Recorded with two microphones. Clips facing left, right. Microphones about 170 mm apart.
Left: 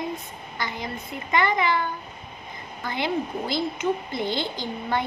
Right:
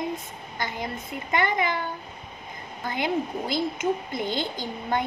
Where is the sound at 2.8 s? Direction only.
50° right (ahead or behind).